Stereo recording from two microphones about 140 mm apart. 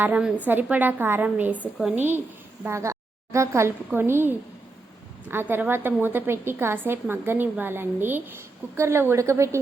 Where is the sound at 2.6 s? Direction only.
20° right (ahead or behind).